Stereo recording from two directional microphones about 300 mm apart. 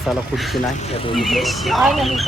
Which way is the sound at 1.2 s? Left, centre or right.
Centre.